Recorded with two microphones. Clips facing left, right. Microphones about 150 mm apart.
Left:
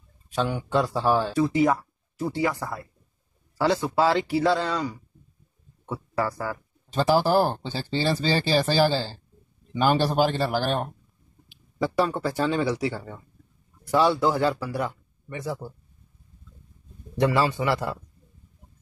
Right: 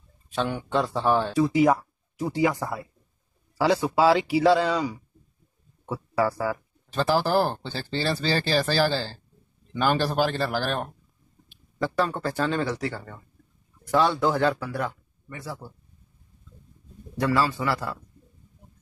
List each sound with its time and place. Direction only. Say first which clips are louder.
0.3 s speech: left 1 dB; centre (ahead or behind)
7.0 s speech: left 2 dB; 10° left (ahead or behind)
15.2 s a man's voice: left 5 dB; 20° left (ahead or behind)
17.2 s a man's voice: left 2 dB; 20° left (ahead or behind)